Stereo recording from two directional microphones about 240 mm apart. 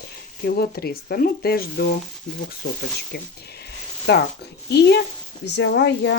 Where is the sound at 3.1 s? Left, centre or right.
Left.